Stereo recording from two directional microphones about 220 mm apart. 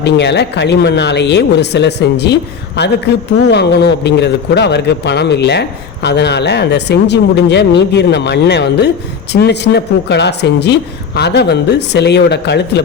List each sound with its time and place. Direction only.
0.0 s speech: 50° left (ahead or behind)